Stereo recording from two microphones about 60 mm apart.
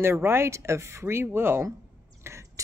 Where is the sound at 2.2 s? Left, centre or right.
Right.